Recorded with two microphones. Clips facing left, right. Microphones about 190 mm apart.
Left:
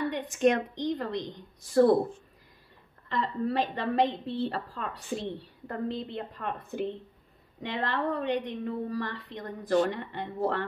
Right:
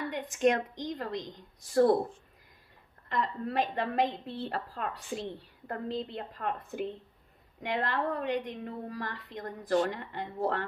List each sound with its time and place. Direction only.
0.1 s a woman's voice: 30° left (ahead or behind)
3.1 s a woman's voice: 30° left (ahead or behind)